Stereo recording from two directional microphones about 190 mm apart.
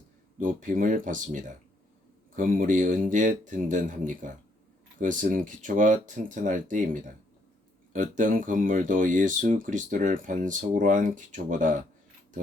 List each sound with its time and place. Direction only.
0.3 s speech: 45° right (ahead or behind)